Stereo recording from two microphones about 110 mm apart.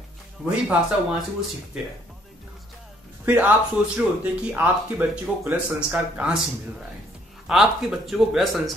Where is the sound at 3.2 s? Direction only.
20° right (ahead or behind).